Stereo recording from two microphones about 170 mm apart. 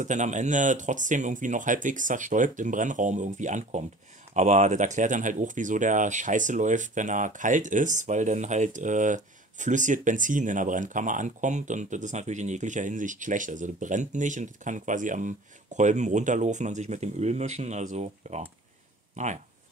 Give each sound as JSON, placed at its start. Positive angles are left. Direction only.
{"t": 0.0, "sound": "speech", "side_deg": -45}